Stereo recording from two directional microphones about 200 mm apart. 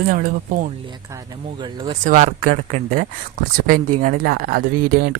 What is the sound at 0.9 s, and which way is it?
Speech, 20° right (ahead or behind).